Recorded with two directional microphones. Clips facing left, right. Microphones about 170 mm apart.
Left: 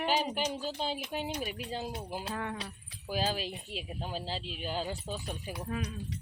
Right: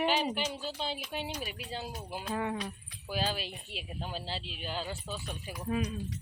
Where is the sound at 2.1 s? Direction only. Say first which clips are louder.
Even; 40° left (ahead or behind).